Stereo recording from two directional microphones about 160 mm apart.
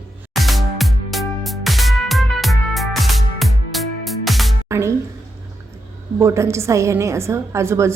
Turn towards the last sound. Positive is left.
turn(degrees=-15)  # may be behind; listen again after turning